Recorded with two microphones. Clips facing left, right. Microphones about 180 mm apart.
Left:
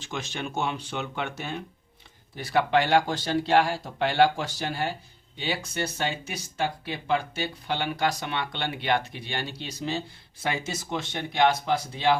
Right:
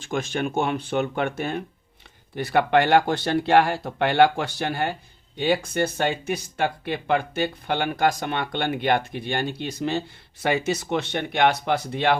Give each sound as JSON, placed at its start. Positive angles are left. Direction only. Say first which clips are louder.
{"t": 0.0, "sound": "speech", "louder": "right 8 dB", "side_deg": -50}